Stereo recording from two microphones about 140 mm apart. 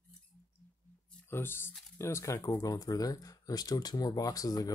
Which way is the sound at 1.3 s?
15° left (ahead or behind).